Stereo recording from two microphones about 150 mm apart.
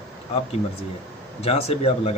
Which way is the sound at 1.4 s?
45° left (ahead or behind).